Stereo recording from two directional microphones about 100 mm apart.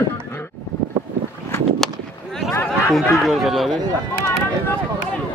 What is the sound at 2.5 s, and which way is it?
Chatter, 25° left (ahead or behind).